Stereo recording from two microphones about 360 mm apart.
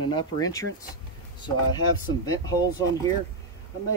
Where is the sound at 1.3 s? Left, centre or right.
Centre.